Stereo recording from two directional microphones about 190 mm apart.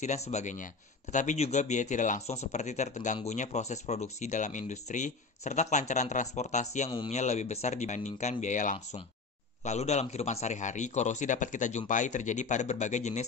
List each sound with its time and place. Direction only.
0.0 s speech: 35° left (ahead or behind)
6.9 s speech: 25° left (ahead or behind)
7.2 s speech: 35° left (ahead or behind)